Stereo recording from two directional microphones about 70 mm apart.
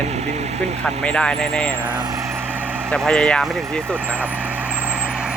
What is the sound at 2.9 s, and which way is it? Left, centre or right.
Speech, centre.